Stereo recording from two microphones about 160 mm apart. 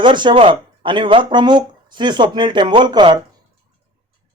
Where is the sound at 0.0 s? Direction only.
30° right (ahead or behind).